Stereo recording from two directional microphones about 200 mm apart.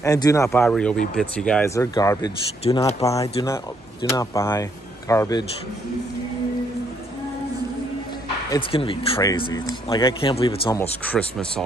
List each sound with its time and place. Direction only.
0.0 s speech: 15° left (ahead or behind)
2.0 s speech: 20° left (ahead or behind)
8.5 s speech: 25° left (ahead or behind)
10.8 s speech: 5° left (ahead or behind)